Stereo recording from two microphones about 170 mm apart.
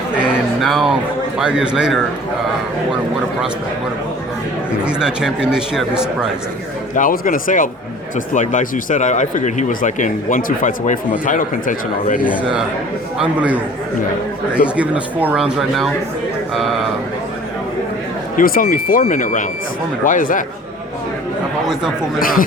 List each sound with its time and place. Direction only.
0.2 s a sound: 5° right (ahead or behind)
1.4 s a man's voice: 5° right (ahead or behind)
4.8 s a man's voice: 5° right (ahead or behind)
6.9 s speech: 55° left (ahead or behind)
13.1 s a man's voice: 10° right (ahead or behind)
14.8 s a man's voice: 10° right (ahead or behind)
18.3 s speech: 60° left (ahead or behind)
22.2 s speech: 55° left (ahead or behind)